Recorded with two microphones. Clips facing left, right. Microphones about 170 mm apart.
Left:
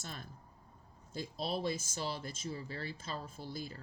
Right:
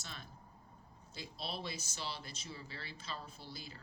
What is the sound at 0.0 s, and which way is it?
Speech, 45° left (ahead or behind).